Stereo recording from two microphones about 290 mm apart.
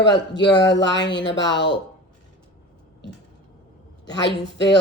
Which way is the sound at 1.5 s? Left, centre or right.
Left.